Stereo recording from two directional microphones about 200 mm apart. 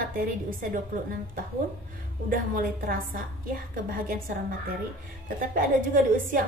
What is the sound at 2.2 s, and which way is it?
A woman's voice, 45° right (ahead or behind).